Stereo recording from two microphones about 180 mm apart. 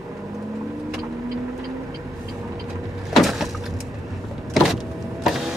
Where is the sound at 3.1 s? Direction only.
Centre (ahead or behind).